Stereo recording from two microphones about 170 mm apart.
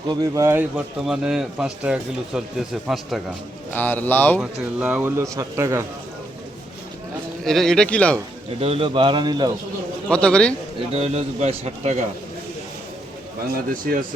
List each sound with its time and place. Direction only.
0.1 s a man's voice: 20° right (ahead or behind); by 3.2 s centre (ahead or behind)
3.7 s speech: 10° left (ahead or behind)
4.4 s speech: 10° right (ahead or behind)
7.4 s a man's voice: centre (ahead or behind)
8.6 s speech: 35° right (ahead or behind)
10.1 s a man's voice: 5° left (ahead or behind)
10.9 s speech: 40° right (ahead or behind)
13.9 s speech: 60° right (ahead or behind)